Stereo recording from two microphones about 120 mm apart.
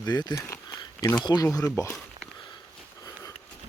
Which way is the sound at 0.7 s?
40° left (ahead or behind).